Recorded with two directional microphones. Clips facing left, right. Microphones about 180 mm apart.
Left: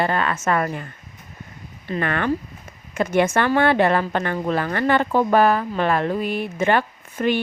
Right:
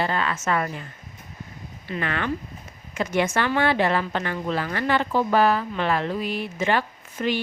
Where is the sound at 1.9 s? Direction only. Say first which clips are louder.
Left 5 dB; 50° left (ahead or behind).